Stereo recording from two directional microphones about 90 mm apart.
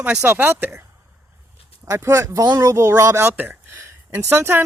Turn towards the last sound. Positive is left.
turn(degrees=-25)  # may be behind; listen again after turning